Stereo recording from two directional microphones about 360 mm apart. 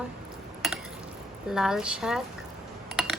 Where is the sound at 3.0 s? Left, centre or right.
Centre.